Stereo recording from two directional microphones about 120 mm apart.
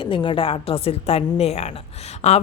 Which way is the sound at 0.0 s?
45° left (ahead or behind).